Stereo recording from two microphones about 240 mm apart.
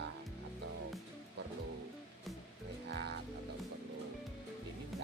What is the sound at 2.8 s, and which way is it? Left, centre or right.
Music, right.